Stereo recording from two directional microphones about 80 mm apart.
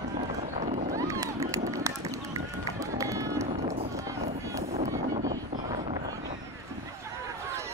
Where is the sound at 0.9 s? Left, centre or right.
Right.